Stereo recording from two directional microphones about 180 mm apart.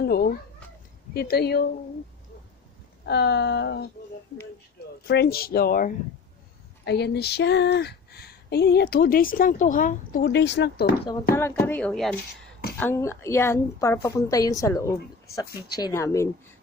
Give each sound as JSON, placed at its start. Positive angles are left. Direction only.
{"t": 0.0, "sound": "cat", "side_deg": 60}
{"t": 1.1, "sound": "speech", "side_deg": 60}
{"t": 3.1, "sound": "a sound", "side_deg": 70}
{"t": 5.0, "sound": "speech", "side_deg": 65}
{"t": 6.8, "sound": "speech", "side_deg": 70}
{"t": 10.2, "sound": "a sound", "side_deg": 70}
{"t": 11.3, "sound": "a woman's voice", "side_deg": 15}
{"t": 12.7, "sound": "a woman's voice", "side_deg": 10}